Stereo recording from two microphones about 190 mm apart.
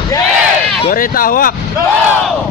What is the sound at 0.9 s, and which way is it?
Speech, 50° left (ahead or behind).